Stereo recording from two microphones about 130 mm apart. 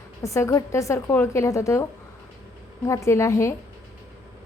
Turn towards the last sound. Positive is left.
turn(degrees=20)  # may be behind; listen again after turning